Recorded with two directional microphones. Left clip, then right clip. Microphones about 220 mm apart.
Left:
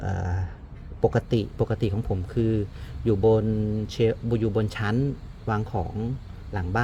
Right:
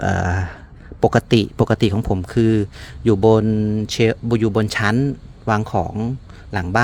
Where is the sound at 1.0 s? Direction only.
35° right (ahead or behind).